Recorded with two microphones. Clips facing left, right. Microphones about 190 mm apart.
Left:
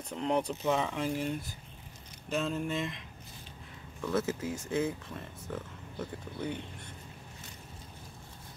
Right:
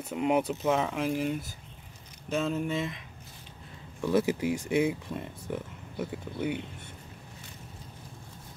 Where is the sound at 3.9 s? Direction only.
15° right (ahead or behind).